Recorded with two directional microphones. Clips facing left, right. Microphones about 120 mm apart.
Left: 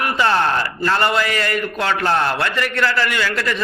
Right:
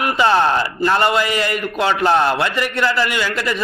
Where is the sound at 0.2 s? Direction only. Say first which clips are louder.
Right 3 dB; 20° right (ahead or behind).